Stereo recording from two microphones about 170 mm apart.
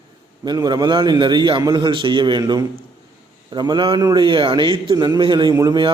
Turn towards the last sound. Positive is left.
turn(degrees=-25)  # may be behind; listen again after turning